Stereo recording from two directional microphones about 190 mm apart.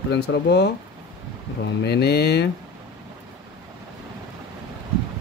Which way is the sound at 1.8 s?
60° left (ahead or behind).